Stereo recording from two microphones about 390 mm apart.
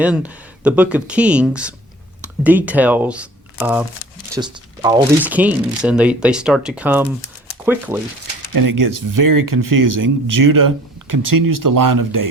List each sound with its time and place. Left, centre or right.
0.0 s speech: centre
8.5 s speech: right